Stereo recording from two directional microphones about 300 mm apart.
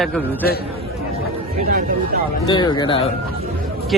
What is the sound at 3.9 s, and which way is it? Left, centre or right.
Speech, centre.